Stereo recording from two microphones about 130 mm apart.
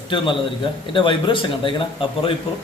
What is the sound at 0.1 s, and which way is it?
A man's voice, 40° left (ahead or behind).